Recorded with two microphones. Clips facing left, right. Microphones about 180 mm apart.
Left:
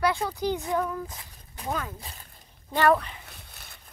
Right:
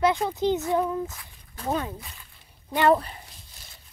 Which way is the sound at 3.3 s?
65° left (ahead or behind).